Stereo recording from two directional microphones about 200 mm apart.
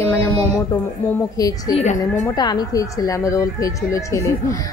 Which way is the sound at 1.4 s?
20° left (ahead or behind).